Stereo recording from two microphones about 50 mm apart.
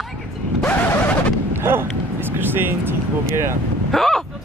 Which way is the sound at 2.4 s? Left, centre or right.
Right.